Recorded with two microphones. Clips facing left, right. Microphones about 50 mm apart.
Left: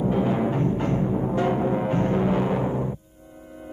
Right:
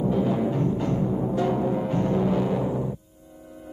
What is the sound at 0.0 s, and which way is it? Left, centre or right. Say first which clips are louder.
Timpani: left 1 dB; left.